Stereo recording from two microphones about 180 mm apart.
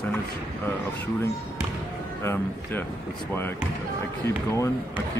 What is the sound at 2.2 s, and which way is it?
Speech, 15° left (ahead or behind).